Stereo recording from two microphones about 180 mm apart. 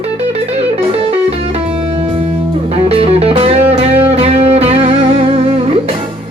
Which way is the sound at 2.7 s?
35° right (ahead or behind).